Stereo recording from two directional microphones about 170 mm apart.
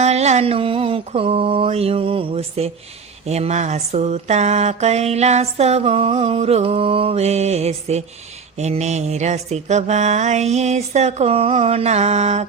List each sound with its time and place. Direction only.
0.0 s mantra: 40° right (ahead or behind)